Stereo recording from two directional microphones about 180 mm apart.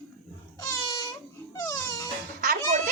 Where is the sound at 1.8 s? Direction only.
20° left (ahead or behind).